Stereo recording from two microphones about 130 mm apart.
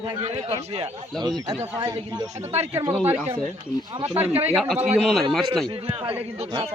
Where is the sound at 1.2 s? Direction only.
35° right (ahead or behind).